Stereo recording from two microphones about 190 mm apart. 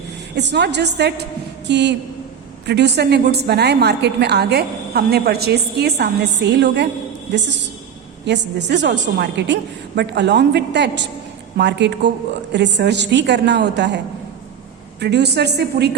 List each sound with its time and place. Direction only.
0.3 s a woman's voice: 65° right (ahead or behind)
15.0 s a woman's voice: 60° right (ahead or behind)